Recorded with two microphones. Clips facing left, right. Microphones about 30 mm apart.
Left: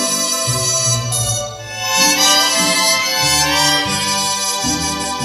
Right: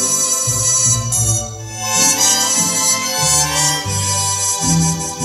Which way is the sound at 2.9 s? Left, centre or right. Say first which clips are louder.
Left 3 dB; left.